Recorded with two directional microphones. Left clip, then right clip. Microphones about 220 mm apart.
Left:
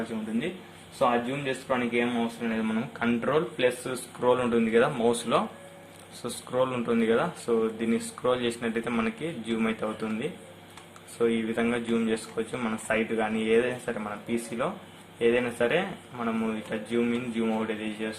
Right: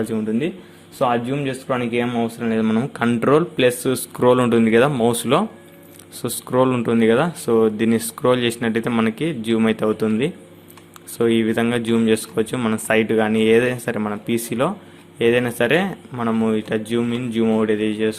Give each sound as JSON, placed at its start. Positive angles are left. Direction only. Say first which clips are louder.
{"t": 0.9, "sound": "speech", "louder": "right 6 dB", "side_deg": -50}